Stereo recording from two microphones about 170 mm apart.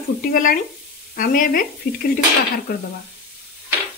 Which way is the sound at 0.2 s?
55° left (ahead or behind).